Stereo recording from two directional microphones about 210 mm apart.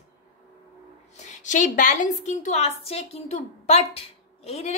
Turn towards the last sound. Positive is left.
turn(degrees=30)  # may be behind; listen again after turning